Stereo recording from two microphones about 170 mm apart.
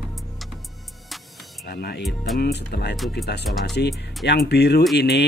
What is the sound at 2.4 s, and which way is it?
Speech, 70° left (ahead or behind).